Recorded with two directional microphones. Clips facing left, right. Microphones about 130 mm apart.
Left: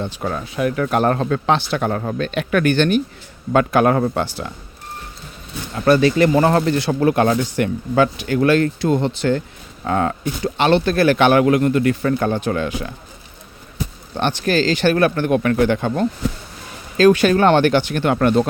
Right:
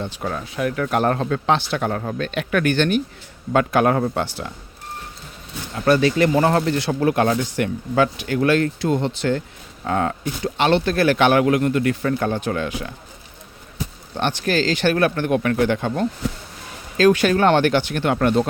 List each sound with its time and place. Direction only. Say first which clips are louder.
0.0 s speech: left 2 dB; 35° left (ahead or behind)
0.5 s speech: left 3 dB; 20° left (ahead or behind)
0.9 s speech: left 1 dB; 40° left (ahead or behind)
5.7 s speech: left 3 dB; 40° left (ahead or behind)
14.2 s speech: left 2 dB; 35° left (ahead or behind)
17.0 s speech: left 3 dB; 30° left (ahead or behind); by 18.4 s 50° left (ahead or behind)